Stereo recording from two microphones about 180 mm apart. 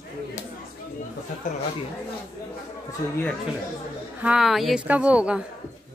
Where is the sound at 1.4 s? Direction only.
45° left (ahead or behind).